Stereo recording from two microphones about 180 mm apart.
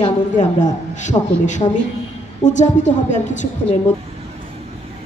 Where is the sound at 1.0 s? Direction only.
40° left (ahead or behind).